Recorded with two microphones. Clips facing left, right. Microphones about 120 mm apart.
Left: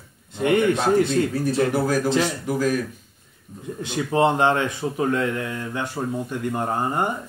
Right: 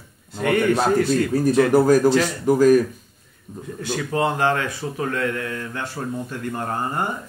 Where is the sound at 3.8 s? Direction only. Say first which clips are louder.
Left 2 dB; 20° left (ahead or behind).